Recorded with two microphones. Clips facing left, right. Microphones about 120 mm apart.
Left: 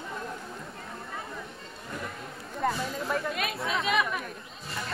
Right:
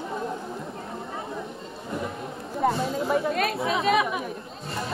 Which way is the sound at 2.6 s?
30° right (ahead or behind).